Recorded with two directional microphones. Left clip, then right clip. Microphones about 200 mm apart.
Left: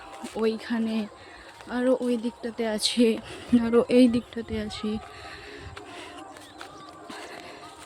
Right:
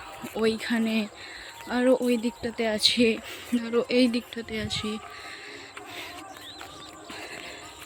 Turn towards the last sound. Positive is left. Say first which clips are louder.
# right 1 dB
turn(degrees=10)  # may be behind; listen again after turning